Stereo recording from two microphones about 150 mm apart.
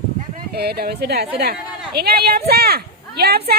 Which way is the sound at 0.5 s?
90° right.